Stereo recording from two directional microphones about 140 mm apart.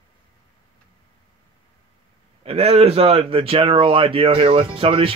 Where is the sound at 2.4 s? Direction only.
45° right (ahead or behind).